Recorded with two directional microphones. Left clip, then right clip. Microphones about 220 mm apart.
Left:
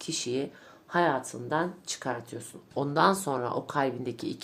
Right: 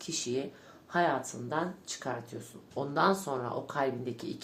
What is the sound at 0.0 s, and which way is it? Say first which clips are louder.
Speech: left 3 dB; 40° left (ahead or behind).